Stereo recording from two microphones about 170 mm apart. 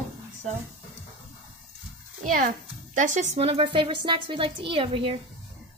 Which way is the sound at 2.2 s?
50° right (ahead or behind).